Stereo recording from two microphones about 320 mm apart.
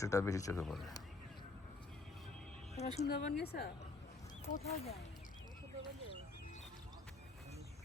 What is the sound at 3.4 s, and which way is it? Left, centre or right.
Speech, left.